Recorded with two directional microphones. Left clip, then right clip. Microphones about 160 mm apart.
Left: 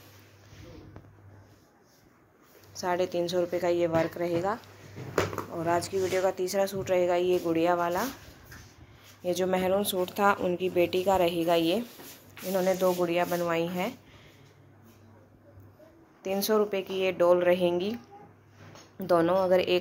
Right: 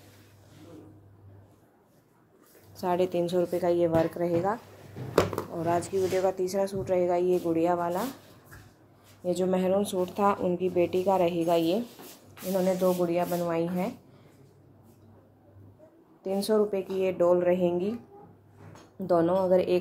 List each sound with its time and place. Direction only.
2.8 s a woman's voice: 20° right (ahead or behind)
5.5 s speech: centre (ahead or behind)
5.8 s speech: 15° right (ahead or behind); by 8.1 s 5° left (ahead or behind)
9.2 s speech: centre (ahead or behind)
12.5 s speech: 5° left (ahead or behind)
16.2 s speech: 5° right (ahead or behind)